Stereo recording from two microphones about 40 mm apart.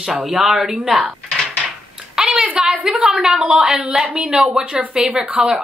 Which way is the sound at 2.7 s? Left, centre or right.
Right.